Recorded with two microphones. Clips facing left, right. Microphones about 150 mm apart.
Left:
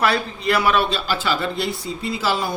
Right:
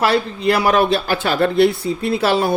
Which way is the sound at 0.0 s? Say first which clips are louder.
Right 4 dB; 35° right (ahead or behind).